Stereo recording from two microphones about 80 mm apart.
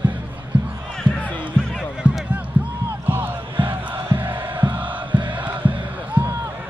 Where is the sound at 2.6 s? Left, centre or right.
Right.